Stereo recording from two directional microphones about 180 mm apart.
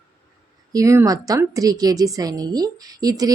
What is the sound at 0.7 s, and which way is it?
A woman's voice, 15° right (ahead or behind).